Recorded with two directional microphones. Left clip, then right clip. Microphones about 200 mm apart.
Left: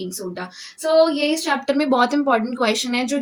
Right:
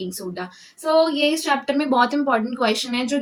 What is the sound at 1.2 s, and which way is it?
A woman's voice, 15° left (ahead or behind).